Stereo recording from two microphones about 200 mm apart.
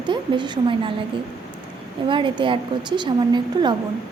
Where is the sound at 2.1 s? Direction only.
25° right (ahead or behind).